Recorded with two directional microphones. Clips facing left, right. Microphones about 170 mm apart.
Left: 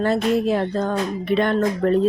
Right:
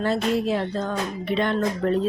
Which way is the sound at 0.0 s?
50° left (ahead or behind).